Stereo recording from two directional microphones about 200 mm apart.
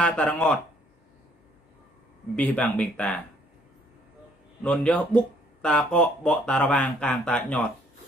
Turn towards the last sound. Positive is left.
turn(degrees=5)  # may be behind; listen again after turning